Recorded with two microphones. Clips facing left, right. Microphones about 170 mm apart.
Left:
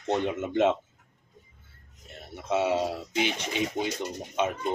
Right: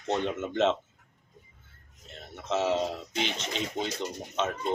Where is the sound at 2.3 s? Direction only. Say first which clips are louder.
Left 2 dB; 10° left (ahead or behind).